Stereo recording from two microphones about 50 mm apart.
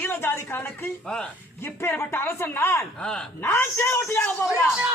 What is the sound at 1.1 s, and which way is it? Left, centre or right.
Speech, centre.